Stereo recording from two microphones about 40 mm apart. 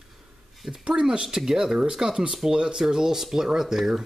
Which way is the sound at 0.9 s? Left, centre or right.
Right.